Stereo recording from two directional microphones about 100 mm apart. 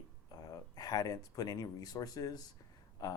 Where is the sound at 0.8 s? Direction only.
40° left (ahead or behind).